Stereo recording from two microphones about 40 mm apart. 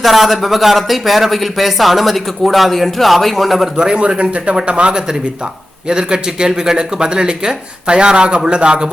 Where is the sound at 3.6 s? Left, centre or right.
Centre.